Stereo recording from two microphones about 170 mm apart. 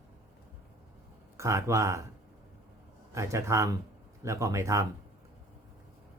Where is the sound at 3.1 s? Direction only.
15° right (ahead or behind).